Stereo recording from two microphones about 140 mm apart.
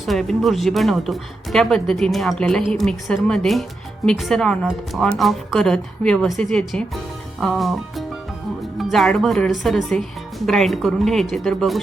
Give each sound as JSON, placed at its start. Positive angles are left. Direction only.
{"t": 0.0, "sound": "speech", "side_deg": 0}